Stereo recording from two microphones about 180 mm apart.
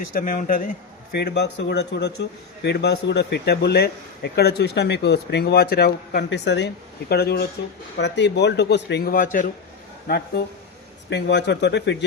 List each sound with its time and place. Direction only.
0.0 s a man's voice: 50° left (ahead or behind); by 6.7 s 75° left (ahead or behind)
7.1 s a man's voice: 60° left (ahead or behind)
7.9 s speech: 75° left (ahead or behind); by 9.5 s 50° left (ahead or behind)
10.1 s a man's voice: 60° left (ahead or behind)